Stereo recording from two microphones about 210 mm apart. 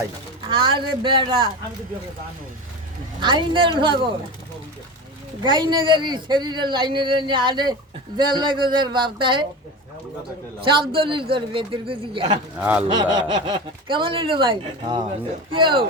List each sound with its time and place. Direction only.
0.5 s speech: 25° right (ahead or behind)
3.2 s speech: 20° right (ahead or behind)
5.4 s speech: 20° right (ahead or behind)
10.6 s speech: 25° right (ahead or behind)
12.5 s speech: 5° right (ahead or behind)
12.9 s speech: 20° right (ahead or behind)